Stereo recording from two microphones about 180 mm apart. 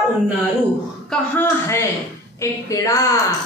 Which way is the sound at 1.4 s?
15° left (ahead or behind).